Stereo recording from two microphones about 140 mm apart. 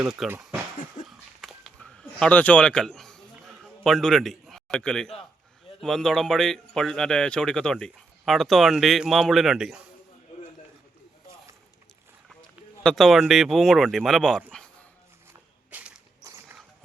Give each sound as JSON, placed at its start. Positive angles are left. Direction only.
{"t": 0.0, "sound": "a man's voice", "side_deg": -5}
{"t": 1.0, "sound": "a sound", "side_deg": 0}
{"t": 5.8, "sound": "a man's voice", "side_deg": 5}
{"t": 12.8, "sound": "a man's voice", "side_deg": 5}
{"t": 14.5, "sound": "a sound", "side_deg": 10}
{"t": 15.3, "sound": "walk", "side_deg": -10}
{"t": 16.2, "sound": "walk", "side_deg": -20}